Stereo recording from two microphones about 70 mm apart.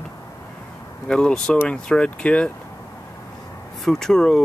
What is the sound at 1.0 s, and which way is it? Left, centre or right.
Speech, centre.